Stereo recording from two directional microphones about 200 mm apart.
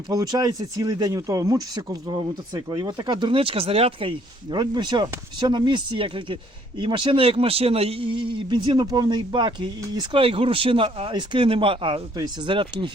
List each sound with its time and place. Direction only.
0.1 s speech: 20° right (ahead or behind)